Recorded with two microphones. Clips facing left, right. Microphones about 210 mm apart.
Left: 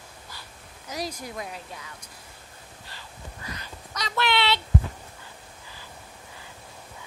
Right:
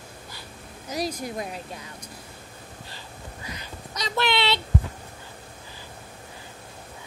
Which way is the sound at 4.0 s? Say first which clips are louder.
Right 1 dB; 20° right (ahead or behind).